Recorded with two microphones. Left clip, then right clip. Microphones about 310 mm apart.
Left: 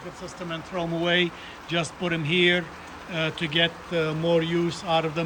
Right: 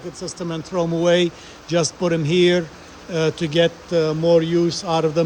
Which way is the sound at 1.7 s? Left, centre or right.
Centre.